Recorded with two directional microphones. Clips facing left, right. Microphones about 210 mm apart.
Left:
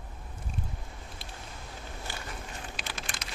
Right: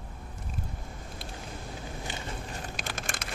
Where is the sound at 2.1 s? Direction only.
20° right (ahead or behind).